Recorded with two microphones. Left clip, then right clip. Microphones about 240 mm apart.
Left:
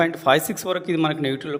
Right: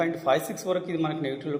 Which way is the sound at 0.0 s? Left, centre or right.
Left.